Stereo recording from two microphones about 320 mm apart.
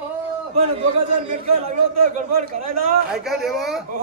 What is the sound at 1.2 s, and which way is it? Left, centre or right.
Speech, centre.